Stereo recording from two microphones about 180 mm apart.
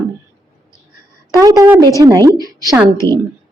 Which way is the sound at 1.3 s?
20° right (ahead or behind).